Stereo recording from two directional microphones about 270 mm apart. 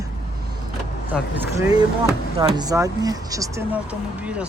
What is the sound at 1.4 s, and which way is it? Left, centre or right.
Speech, centre.